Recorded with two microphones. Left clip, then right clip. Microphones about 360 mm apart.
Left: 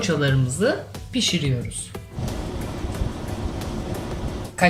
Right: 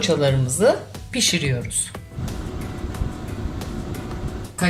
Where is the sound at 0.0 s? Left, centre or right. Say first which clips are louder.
Right 3 dB; centre.